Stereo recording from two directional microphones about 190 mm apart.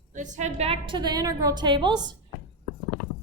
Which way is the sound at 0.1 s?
40° right (ahead or behind).